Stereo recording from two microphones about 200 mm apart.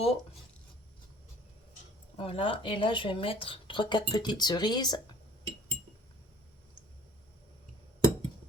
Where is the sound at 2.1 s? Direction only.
25° left (ahead or behind).